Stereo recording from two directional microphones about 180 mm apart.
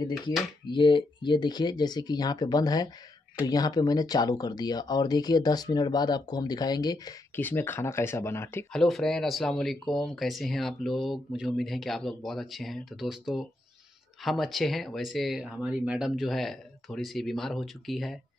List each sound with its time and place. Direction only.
0.7 s speech: 25° left (ahead or behind)
7.4 s speech: 10° left (ahead or behind)
8.7 s speech: centre (ahead or behind)